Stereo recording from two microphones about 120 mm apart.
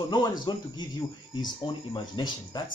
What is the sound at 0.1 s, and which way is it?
Speech, 35° left (ahead or behind).